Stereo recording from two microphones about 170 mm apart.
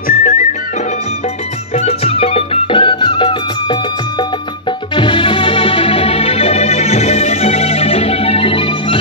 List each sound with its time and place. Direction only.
0.1 s music: 50° left (ahead or behind)
1.8 s music: 35° left (ahead or behind)
4.9 s music: 30° left (ahead or behind)